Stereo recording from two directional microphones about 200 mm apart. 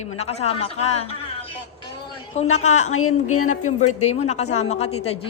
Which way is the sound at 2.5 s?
35° left (ahead or behind).